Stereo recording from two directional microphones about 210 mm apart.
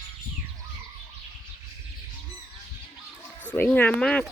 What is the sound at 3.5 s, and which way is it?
Speech, 10° left (ahead or behind).